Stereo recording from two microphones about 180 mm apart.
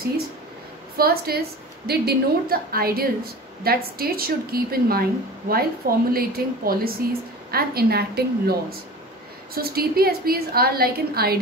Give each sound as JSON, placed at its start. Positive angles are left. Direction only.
{"t": 0.9, "sound": "a woman's voice", "side_deg": -55}